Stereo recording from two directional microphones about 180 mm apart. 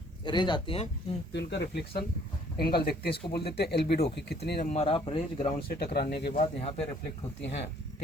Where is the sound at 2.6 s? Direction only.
60° left (ahead or behind).